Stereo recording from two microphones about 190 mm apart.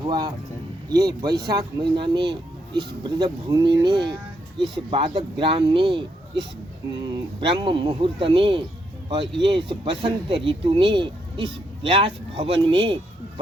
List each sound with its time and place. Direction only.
0.0 s speech: 25° right (ahead or behind)